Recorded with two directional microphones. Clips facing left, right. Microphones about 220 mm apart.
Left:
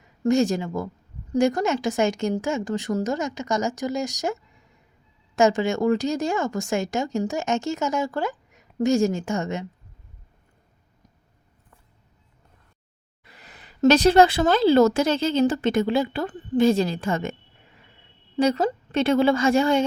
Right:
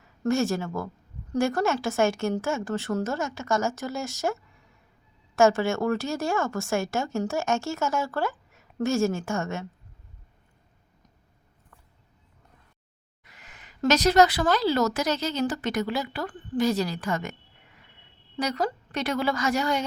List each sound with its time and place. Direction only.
0.2 s a woman's voice: 15° left (ahead or behind)
5.4 s a woman's voice: 15° left (ahead or behind)
13.2 s a woman's voice: 35° left (ahead or behind)
18.3 s a woman's voice: 25° left (ahead or behind)